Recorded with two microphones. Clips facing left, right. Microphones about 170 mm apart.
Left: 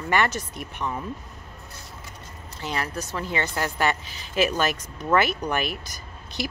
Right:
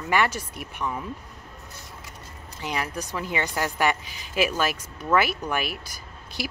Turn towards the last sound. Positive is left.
turn(degrees=-5)  # may be behind; listen again after turning